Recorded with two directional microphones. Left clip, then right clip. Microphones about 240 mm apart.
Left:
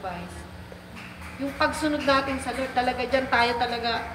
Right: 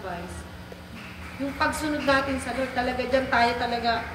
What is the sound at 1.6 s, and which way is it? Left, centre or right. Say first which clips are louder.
A woman's voice: left 2 dB; left.